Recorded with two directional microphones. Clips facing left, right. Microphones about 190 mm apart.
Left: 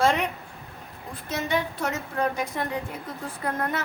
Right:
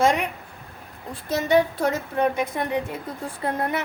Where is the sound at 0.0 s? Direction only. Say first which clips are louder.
Right 2 dB; 15° right (ahead or behind).